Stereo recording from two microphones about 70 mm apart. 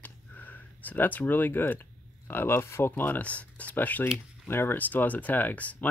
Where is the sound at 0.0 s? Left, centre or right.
Left.